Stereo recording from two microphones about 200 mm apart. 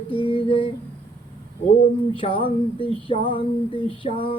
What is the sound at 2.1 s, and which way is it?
Speech, 25° left (ahead or behind).